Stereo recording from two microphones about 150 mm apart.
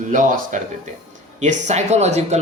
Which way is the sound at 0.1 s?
60° right (ahead or behind).